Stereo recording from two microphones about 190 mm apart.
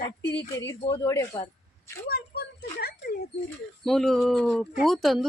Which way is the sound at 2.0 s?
55° left (ahead or behind).